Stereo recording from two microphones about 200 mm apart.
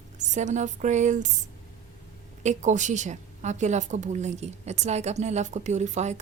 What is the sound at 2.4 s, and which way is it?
A woman's voice, 35° right (ahead or behind).